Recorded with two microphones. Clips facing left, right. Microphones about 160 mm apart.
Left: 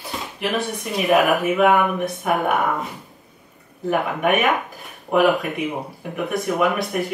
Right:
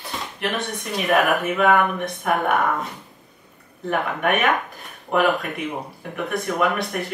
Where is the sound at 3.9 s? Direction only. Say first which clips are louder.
Left 2 dB; 5° left (ahead or behind).